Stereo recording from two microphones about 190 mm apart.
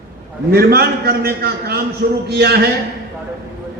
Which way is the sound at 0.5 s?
55° right (ahead or behind).